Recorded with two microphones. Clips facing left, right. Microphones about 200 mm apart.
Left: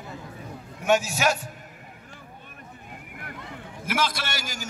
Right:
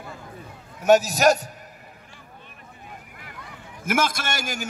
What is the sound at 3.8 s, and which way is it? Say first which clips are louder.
Speech: right 3 dB; 45° right (ahead or behind).